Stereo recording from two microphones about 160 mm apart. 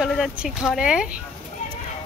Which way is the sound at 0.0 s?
Centre (ahead or behind).